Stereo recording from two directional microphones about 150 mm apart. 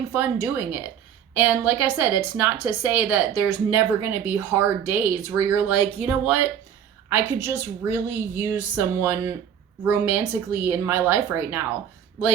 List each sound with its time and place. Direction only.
0.1 s a woman's voice: 15° right (ahead or behind)